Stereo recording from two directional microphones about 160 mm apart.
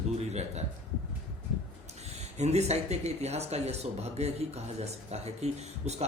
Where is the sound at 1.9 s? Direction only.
45° right (ahead or behind).